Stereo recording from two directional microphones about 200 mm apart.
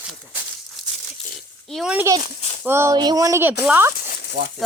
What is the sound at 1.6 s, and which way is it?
A child's voice, centre (ahead or behind).